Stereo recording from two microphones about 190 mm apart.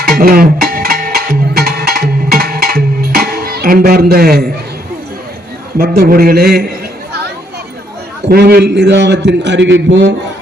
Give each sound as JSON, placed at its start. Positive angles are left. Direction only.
{"t": 0.1, "sound": "music", "side_deg": -50}
{"t": 5.7, "sound": "a man's voice", "side_deg": -55}
{"t": 8.3, "sound": "a man's voice", "side_deg": -55}